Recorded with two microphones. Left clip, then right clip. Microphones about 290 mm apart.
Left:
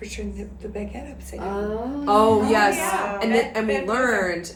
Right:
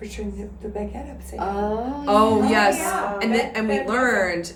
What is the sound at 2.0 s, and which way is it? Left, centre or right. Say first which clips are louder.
A woman's voice: left 1 dB; centre.